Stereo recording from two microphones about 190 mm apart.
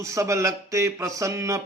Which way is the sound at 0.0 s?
15° right (ahead or behind).